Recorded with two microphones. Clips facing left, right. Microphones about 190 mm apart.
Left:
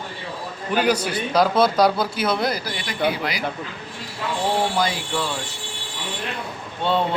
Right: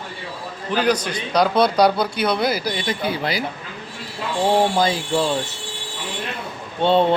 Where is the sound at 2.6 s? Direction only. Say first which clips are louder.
Right 1 dB; 20° right (ahead or behind).